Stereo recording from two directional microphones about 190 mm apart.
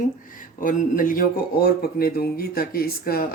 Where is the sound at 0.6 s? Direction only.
45° left (ahead or behind).